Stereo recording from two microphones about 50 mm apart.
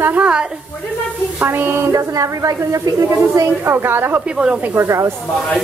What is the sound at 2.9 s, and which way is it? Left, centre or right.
Speech, right.